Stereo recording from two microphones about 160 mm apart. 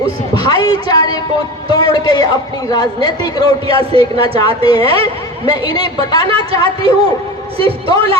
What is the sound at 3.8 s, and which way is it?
Speech, 35° right (ahead or behind).